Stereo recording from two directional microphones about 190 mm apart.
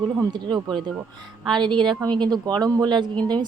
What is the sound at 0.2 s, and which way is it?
Speech, 20° right (ahead or behind).